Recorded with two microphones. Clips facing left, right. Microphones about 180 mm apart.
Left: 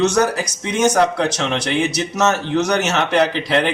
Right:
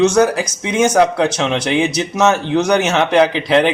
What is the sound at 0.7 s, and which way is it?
A man's voice, 55° right (ahead or behind).